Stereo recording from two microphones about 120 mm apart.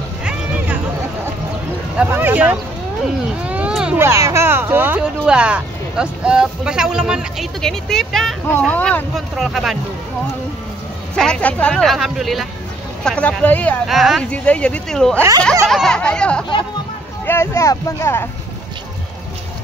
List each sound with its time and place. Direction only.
0.2 s a sound: 10° right (ahead or behind)
2.0 s speech: 15° right (ahead or behind)
4.0 s speech: 25° right (ahead or behind); by 8.4 s 5° left (ahead or behind)
8.5 s speech: 15° left (ahead or behind)
9.1 s speech: centre (ahead or behind)
11.1 s speech: 10° left (ahead or behind)
13.8 s speech: centre (ahead or behind)
14.3 s speech: 10° left (ahead or behind)
17.3 s speech: 20° left (ahead or behind)